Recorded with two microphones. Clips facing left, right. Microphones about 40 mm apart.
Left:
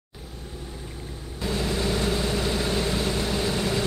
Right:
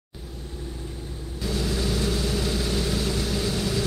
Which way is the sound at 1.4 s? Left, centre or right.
Left.